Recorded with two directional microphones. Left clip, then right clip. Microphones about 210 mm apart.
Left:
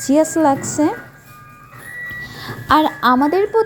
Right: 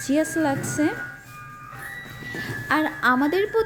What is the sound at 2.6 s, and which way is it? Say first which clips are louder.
Speech: left 8 dB; 25° left (ahead or behind).